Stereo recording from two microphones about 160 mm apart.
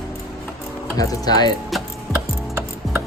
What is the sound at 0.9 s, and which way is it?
Speech, 25° left (ahead or behind).